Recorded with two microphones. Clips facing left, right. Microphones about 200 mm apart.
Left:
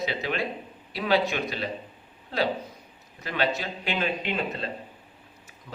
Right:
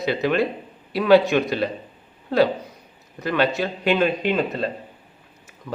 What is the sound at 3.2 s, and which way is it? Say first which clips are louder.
A man's voice: right 7 dB; 55° right (ahead or behind).